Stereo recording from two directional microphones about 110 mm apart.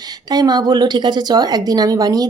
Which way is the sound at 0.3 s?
40° right (ahead or behind).